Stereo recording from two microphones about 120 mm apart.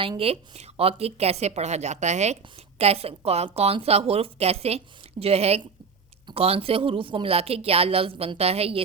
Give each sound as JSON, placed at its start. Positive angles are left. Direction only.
{"t": 0.2, "sound": "speech", "side_deg": -60}